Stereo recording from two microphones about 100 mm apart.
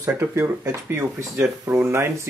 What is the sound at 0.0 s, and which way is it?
Speech, 30° right (ahead or behind).